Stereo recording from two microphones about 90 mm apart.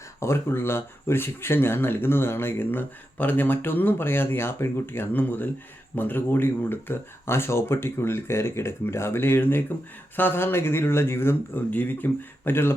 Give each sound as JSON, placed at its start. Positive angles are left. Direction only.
{"t": 0.2, "sound": "speech", "side_deg": 30}